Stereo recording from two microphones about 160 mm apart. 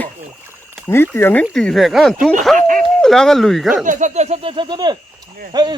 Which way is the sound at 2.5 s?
55° right (ahead or behind).